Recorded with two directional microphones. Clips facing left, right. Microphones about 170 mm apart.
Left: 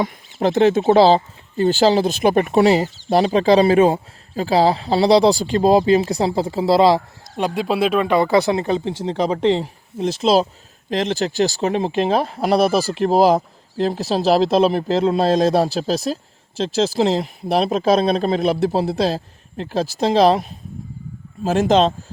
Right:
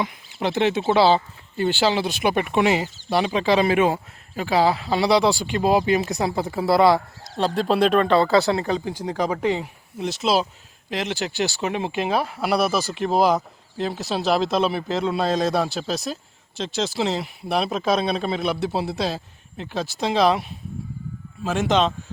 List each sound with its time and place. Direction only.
0.0 s speech: 40° left (ahead or behind); by 7.0 s 25° left (ahead or behind)
7.3 s speech: 10° left (ahead or behind); by 21.9 s 35° left (ahead or behind)